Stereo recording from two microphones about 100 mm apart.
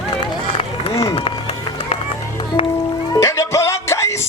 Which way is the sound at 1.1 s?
80° left.